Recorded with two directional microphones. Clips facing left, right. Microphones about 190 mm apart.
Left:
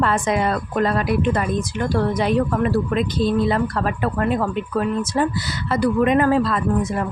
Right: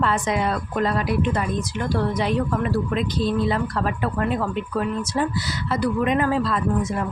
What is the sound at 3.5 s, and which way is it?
Speech, 55° left (ahead or behind).